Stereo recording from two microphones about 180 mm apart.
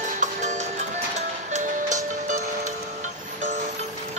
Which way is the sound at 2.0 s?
45° right (ahead or behind).